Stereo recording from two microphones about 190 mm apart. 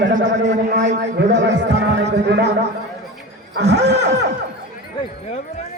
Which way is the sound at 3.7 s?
65° right (ahead or behind).